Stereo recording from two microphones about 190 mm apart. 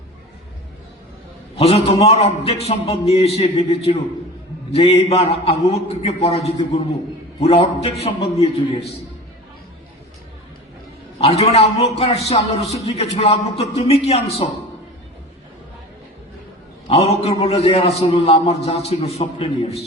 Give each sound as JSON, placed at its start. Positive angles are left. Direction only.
{"t": 1.5, "sound": "a man's voice", "side_deg": 30}
{"t": 11.2, "sound": "a man's voice", "side_deg": 30}
{"t": 16.9, "sound": "a man's voice", "side_deg": 30}